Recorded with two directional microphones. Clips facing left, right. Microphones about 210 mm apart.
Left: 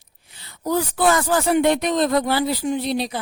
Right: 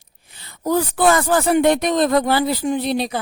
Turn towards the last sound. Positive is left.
turn(degrees=-55)  # may be behind; listen again after turning